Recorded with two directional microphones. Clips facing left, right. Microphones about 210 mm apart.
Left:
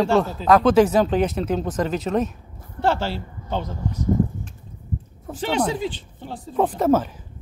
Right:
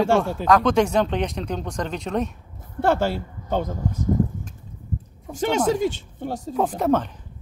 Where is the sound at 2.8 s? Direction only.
50° right (ahead or behind).